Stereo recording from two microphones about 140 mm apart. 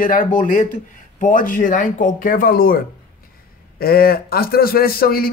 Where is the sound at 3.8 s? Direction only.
90° left.